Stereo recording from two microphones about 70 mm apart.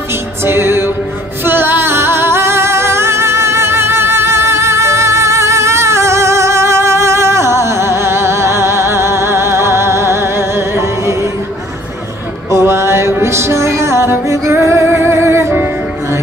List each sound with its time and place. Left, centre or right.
0.1 s music: right
12.4 s music: right